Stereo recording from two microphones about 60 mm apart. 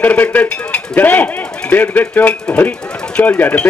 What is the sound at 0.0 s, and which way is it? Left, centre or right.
A man's voice, left.